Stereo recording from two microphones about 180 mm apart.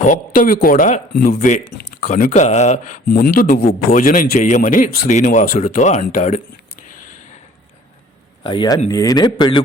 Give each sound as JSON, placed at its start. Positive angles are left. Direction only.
{"t": 0.0, "sound": "a man's voice", "side_deg": 45}
{"t": 3.1, "sound": "a man's voice", "side_deg": 55}
{"t": 8.4, "sound": "a man's voice", "side_deg": 25}